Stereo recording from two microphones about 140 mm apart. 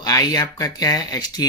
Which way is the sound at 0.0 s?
25° left (ahead or behind).